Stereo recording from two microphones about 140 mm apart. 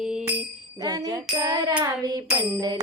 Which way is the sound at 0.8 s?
30° right (ahead or behind).